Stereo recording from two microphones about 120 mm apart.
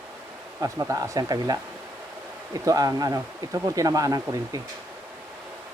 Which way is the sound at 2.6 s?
30° right (ahead or behind).